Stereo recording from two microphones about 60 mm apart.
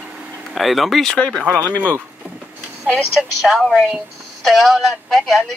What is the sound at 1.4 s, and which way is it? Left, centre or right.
Speech, left.